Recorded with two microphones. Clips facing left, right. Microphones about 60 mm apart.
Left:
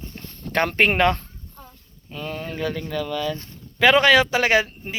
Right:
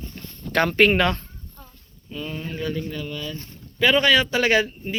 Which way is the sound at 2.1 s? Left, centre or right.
Left.